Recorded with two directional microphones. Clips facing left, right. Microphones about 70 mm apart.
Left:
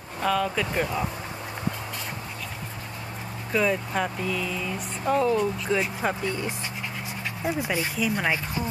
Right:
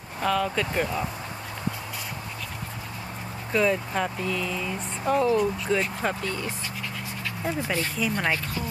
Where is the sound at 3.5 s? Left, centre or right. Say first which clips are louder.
Right 1 dB; centre.